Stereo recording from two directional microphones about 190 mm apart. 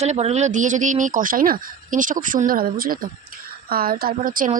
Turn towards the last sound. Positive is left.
turn(degrees=-45)  # may be behind; listen again after turning